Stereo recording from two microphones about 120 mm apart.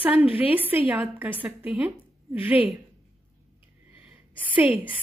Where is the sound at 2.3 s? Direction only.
15° right (ahead or behind).